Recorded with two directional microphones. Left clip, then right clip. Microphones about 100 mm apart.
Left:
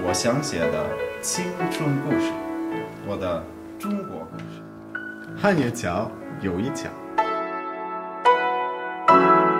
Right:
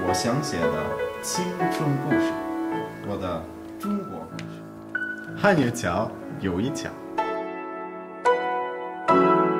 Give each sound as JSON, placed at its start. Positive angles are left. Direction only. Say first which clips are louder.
{"t": 0.0, "sound": "speech", "louder": "left 1 dB", "side_deg": 0}
{"t": 2.6, "sound": "music", "louder": "even", "side_deg": -5}
{"t": 5.4, "sound": "speech", "louder": "right 1 dB", "side_deg": 0}
{"t": 7.2, "sound": "music", "louder": "left 4 dB", "side_deg": 20}